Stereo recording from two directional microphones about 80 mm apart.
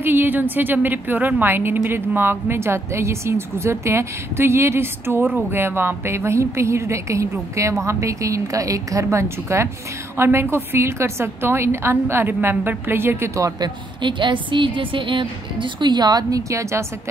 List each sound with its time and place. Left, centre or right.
0.0 s a woman's voice: right
14.0 s a woman's voice: right